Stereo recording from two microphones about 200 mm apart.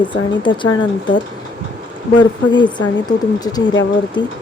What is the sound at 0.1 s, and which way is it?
Speech, 25° left (ahead or behind).